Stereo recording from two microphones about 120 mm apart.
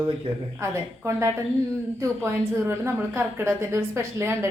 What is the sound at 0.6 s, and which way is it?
Speech, 25° right (ahead or behind).